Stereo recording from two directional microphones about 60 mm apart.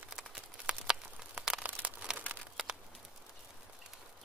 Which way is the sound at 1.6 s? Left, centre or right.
Right.